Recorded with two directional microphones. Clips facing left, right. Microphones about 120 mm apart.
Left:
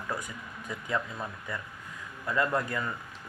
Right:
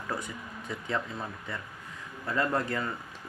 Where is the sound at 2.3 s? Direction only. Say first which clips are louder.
Even; 30° right (ahead or behind).